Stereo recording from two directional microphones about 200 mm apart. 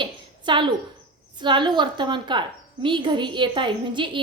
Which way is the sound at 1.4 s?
25° right (ahead or behind).